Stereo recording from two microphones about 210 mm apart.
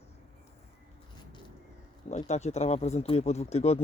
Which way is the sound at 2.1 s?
35° left (ahead or behind).